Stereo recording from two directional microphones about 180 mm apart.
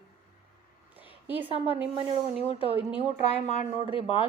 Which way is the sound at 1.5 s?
30° right (ahead or behind).